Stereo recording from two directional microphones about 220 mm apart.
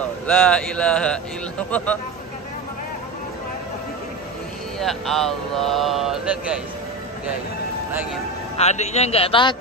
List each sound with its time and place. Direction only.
0.0 s a man's voice: 5° left (ahead or behind)
4.7 s speech: centre (ahead or behind)
8.5 s a man's voice: 30° left (ahead or behind)